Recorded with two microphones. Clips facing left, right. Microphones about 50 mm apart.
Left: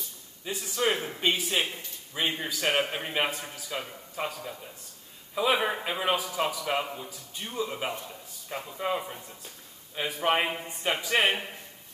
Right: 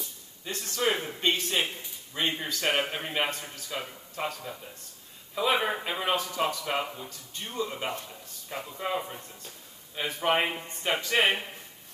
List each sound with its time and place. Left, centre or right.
0.5 s a man's voice: centre